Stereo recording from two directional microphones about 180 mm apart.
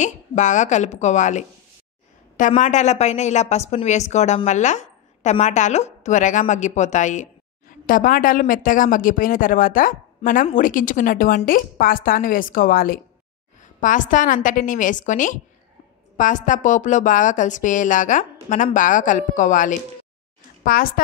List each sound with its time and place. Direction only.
0.0 s a woman's voice: 45° left (ahead or behind)